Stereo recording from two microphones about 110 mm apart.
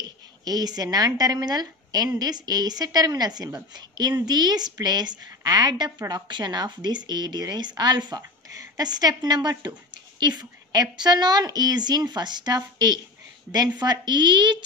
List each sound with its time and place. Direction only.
0.5 s speech: 35° right (ahead or behind)